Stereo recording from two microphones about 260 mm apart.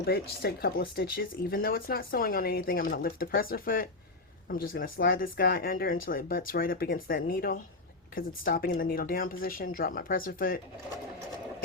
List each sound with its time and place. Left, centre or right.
0.0 s speech: left